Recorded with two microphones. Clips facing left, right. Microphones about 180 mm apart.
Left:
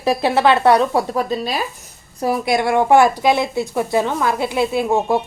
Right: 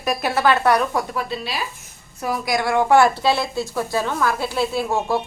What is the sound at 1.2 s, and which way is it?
Speech, 40° left (ahead or behind).